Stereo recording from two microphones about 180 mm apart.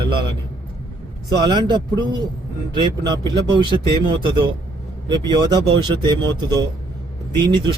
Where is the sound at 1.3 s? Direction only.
25° right (ahead or behind).